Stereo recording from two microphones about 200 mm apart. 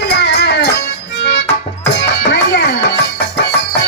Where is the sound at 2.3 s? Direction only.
55° left (ahead or behind).